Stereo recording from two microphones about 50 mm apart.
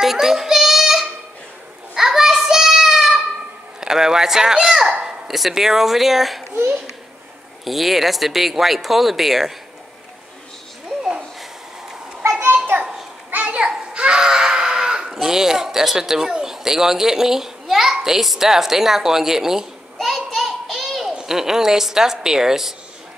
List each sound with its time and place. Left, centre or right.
0.0 s child singing: centre
2.0 s a sound: centre
3.8 s children playing: centre
5.0 s speech: centre
7.6 s speech: centre
13.3 s children playing: right
13.9 s screaming: centre
15.1 s speech: centre
20.0 s a sound: centre
21.3 s speech: centre